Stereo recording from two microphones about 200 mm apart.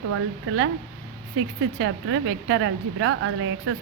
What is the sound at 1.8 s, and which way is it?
Speech, 75° right (ahead or behind).